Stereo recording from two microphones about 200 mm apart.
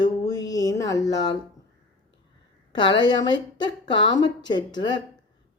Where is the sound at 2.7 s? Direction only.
25° left (ahead or behind).